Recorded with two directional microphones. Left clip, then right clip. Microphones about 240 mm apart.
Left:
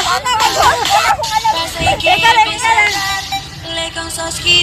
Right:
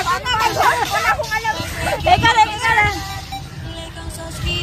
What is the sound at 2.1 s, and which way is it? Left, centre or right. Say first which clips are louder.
Child singing: left 2 dB; centre.